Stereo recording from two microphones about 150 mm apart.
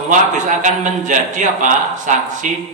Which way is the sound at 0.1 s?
55° right (ahead or behind).